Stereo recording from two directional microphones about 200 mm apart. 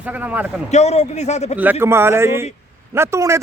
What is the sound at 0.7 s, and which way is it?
Speech, 35° left (ahead or behind).